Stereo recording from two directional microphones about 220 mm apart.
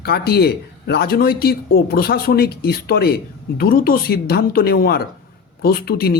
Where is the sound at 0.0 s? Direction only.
45° left (ahead or behind).